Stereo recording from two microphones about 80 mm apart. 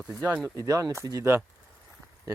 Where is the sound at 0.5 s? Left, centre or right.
Right.